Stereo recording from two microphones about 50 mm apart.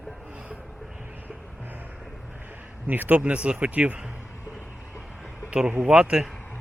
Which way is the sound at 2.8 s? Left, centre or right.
Right.